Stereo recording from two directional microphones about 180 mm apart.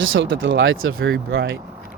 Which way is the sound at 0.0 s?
90° right.